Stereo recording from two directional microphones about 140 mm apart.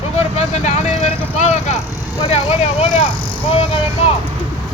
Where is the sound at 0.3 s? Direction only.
55° left (ahead or behind).